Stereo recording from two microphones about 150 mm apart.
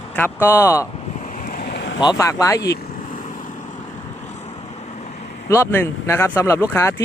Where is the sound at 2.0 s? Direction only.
20° left (ahead or behind).